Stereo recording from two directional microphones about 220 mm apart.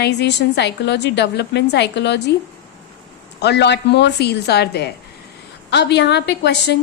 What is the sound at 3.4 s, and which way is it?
A woman's voice, 50° left (ahead or behind).